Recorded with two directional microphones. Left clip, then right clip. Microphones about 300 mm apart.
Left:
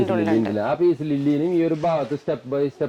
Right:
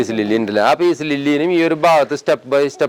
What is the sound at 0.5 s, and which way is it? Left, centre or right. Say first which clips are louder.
A man's voice: right 7 dB; centre.